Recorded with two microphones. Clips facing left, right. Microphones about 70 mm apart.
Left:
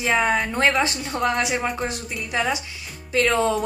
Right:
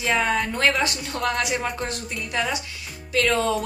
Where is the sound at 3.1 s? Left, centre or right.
Left.